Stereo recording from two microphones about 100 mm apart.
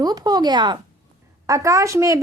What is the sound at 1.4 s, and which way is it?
Speech, 35° right (ahead or behind).